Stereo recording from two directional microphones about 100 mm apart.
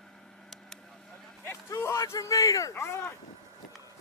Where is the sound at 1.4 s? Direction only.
25° left (ahead or behind).